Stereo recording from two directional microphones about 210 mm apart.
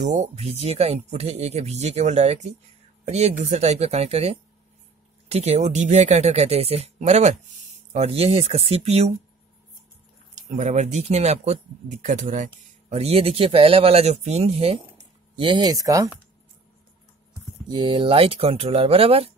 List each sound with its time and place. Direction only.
0.0 s speech: 35° right (ahead or behind)
10.3 s speech: 35° right (ahead or behind); by 16.1 s 15° right (ahead or behind)
17.6 s speech: 20° right (ahead or behind)